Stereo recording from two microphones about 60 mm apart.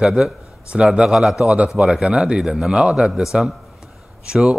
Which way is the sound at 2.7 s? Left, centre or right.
Centre.